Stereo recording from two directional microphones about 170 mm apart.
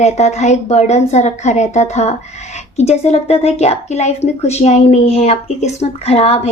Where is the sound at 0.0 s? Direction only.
40° left (ahead or behind).